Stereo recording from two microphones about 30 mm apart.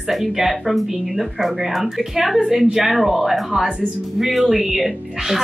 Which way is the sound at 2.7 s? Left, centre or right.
Centre.